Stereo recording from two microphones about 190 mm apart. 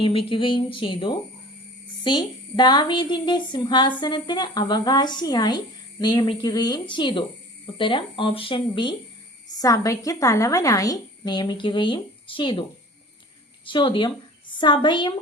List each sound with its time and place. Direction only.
0.0 s a woman's voice: 30° left (ahead or behind)
13.7 s a woman's voice: 25° left (ahead or behind)